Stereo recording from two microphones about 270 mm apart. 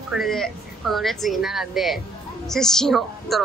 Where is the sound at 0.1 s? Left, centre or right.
Centre.